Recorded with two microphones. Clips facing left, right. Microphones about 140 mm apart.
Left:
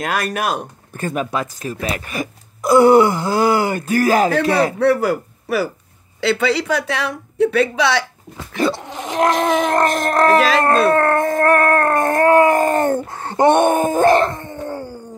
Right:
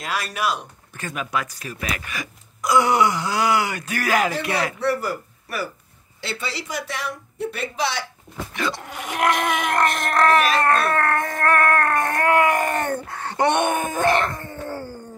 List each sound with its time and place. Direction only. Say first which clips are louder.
0.0 s speech: left 5 dB; 55° left (ahead or behind)
3.9 s wail: left 7 dB; 35° left (ahead or behind)
4.7 s speech: left 8 dB; 65° left (ahead or behind)
8.5 s speech: left 8 dB; 30° left (ahead or behind)
9.8 s wail: left 4 dB; 40° left (ahead or behind)
10.6 s howl: left 6 dB; 30° left (ahead or behind)
13.6 s wail: left 7 dB; 35° left (ahead or behind)
14.3 s a sound: left 4 dB; 20° left (ahead or behind)